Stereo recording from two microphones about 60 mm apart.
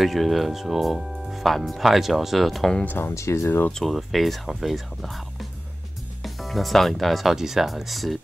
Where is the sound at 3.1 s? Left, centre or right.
Left.